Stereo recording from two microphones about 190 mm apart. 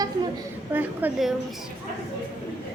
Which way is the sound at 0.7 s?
10° right (ahead or behind).